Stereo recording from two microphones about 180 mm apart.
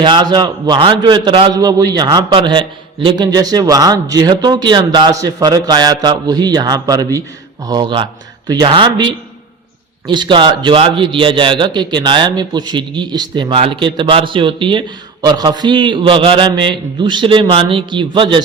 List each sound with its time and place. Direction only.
0.0 s a man's voice: 25° right (ahead or behind)